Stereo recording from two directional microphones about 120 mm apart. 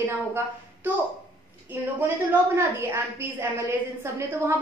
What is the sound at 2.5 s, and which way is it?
A woman's voice, 20° right (ahead or behind).